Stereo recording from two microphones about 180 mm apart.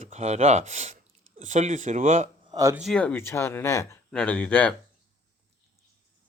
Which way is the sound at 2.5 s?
20° right (ahead or behind).